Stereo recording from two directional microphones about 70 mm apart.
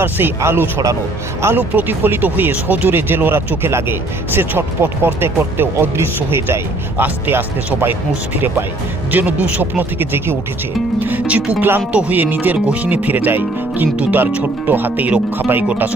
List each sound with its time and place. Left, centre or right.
0.0 s speech: right